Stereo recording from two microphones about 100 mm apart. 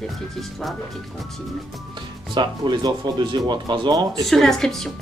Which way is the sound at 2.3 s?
50° right (ahead or behind).